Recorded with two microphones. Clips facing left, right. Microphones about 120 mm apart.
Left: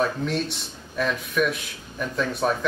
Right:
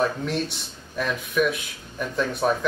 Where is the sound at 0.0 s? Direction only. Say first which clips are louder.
Even; centre (ahead or behind).